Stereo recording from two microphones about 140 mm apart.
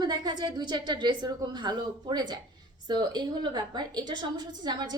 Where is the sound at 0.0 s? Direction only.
30° right (ahead or behind).